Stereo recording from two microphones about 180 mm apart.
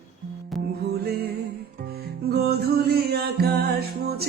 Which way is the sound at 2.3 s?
60° right (ahead or behind).